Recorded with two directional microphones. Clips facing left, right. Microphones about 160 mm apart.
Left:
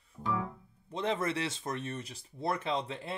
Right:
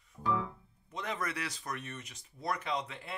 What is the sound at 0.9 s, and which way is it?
Speech, 30° left (ahead or behind).